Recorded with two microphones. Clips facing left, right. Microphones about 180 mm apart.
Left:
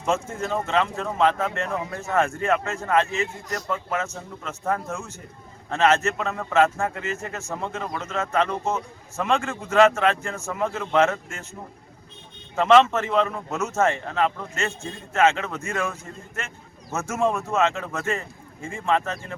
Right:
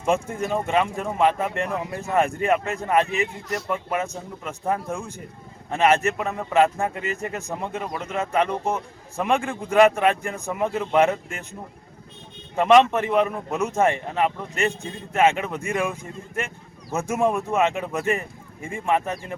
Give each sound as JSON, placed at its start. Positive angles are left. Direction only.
{"t": 0.0, "sound": "speech", "side_deg": -15}
{"t": 12.5, "sound": "speech", "side_deg": -15}